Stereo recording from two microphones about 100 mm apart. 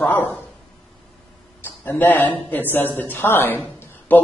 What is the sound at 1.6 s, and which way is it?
A man's voice, 20° left (ahead or behind).